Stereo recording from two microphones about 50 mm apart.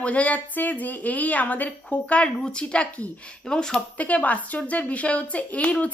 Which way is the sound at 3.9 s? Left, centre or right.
Left.